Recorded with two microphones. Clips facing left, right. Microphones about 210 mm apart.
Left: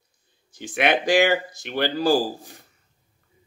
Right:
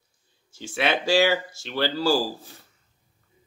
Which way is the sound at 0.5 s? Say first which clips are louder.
Left 3 dB; 15° left (ahead or behind).